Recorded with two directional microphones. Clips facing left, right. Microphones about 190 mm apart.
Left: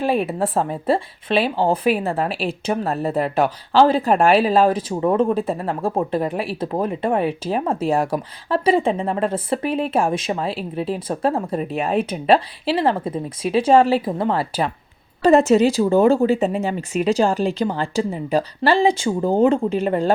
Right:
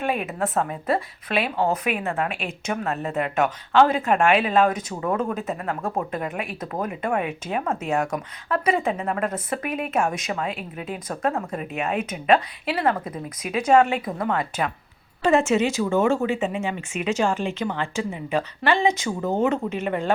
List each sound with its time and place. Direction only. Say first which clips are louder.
0.0 s speech: left 5 dB; 30° left (ahead or behind)